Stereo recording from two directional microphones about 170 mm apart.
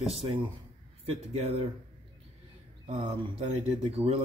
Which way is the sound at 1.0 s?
35° right (ahead or behind).